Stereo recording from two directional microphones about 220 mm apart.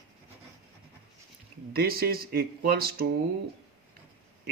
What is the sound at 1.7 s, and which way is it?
Speech, 45° right (ahead or behind).